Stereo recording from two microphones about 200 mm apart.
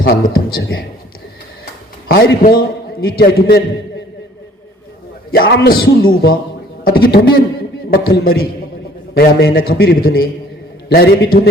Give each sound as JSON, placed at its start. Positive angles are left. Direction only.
{"t": 0.0, "sound": "a man's voice", "side_deg": 50}
{"t": 2.0, "sound": "a man's voice", "side_deg": 50}
{"t": 5.3, "sound": "a man's voice", "side_deg": 50}
{"t": 6.8, "sound": "a man's voice", "side_deg": 50}